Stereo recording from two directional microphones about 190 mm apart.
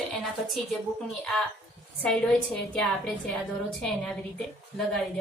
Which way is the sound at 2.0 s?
5° left (ahead or behind).